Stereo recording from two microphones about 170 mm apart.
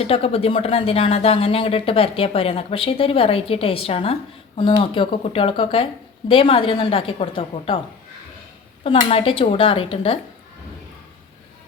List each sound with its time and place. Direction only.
0.0 s speech: 35° left (ahead or behind)
8.8 s speech: 35° left (ahead or behind)